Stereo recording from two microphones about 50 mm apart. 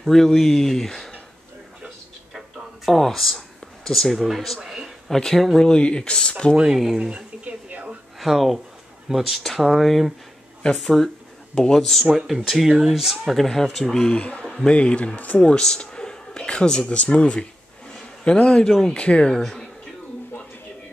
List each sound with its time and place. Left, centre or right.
0.0 s speech: centre
2.9 s speech: centre
4.6 s a sound: centre
5.1 s speech: centre
5.6 s speech: centre
6.5 s speech: centre
7.4 s television: right
8.2 s speech: centre
10.6 s speech: centre
14.1 s speech: left
18.9 s speech: left